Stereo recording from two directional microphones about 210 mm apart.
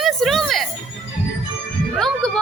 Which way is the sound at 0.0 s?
Centre (ahead or behind).